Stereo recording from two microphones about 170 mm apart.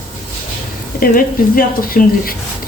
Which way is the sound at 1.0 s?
55° left (ahead or behind).